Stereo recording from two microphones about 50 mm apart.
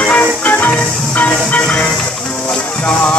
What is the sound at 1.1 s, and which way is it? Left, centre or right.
Train, left.